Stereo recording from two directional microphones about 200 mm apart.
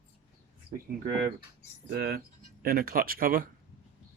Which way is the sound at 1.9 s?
55° right (ahead or behind).